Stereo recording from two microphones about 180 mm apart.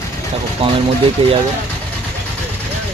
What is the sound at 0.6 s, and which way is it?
Speech, 35° right (ahead or behind).